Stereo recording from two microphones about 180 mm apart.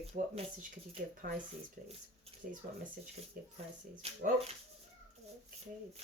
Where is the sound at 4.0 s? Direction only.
35° right (ahead or behind).